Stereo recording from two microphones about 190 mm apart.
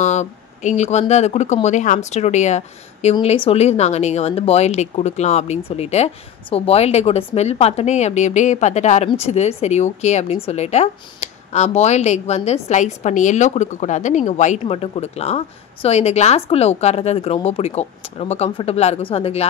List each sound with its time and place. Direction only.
0.0 s speech: 40° left (ahead or behind)